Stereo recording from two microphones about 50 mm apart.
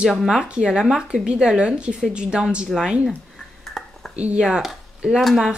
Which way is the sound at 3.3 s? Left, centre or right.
Centre.